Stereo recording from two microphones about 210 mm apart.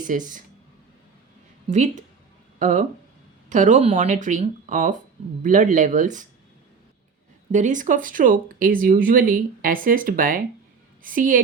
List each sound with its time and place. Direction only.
0.0 s speech: 40° right (ahead or behind)
1.6 s a woman's voice: 35° right (ahead or behind)
7.5 s speech: 35° right (ahead or behind)